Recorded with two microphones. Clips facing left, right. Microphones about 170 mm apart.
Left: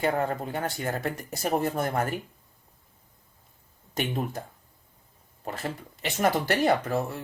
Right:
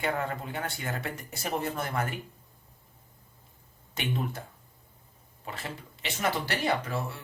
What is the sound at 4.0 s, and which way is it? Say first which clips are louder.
Speech: left 3 dB; 40° left (ahead or behind).